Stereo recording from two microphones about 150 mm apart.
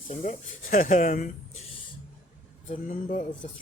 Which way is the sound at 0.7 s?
60° left (ahead or behind).